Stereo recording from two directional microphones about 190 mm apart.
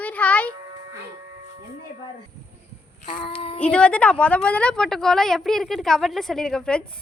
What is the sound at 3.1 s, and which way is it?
Child singing, 25° left (ahead or behind).